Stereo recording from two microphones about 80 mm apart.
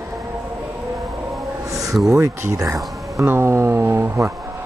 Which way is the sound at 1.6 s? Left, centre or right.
Right.